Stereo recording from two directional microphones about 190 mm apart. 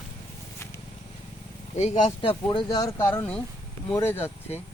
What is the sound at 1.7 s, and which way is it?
Speech, 40° left (ahead or behind).